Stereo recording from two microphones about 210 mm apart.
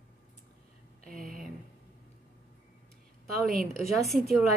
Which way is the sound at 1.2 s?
40° right (ahead or behind).